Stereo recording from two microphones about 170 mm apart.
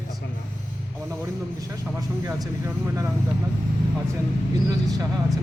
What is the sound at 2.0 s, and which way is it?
A man's voice, 20° right (ahead or behind).